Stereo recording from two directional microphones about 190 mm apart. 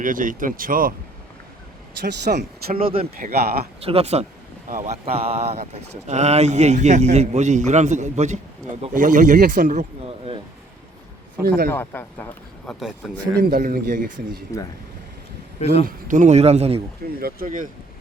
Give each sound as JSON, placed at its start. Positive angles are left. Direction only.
{"t": 0.0, "sound": "speech", "side_deg": -45}
{"t": 2.0, "sound": "speech", "side_deg": -60}
{"t": 2.7, "sound": "speech", "side_deg": -30}
{"t": 3.2, "sound": "speech", "side_deg": -55}
{"t": 3.8, "sound": "a man's voice", "side_deg": -35}
{"t": 11.4, "sound": "speech", "side_deg": -55}
{"t": 11.7, "sound": "speech", "side_deg": 10}
{"t": 13.4, "sound": "speech", "side_deg": -50}
{"t": 14.5, "sound": "speech", "side_deg": 15}
{"t": 15.6, "sound": "speech", "side_deg": 30}
{"t": 15.9, "sound": "a man's voice", "side_deg": -45}
{"t": 17.2, "sound": "speech", "side_deg": -50}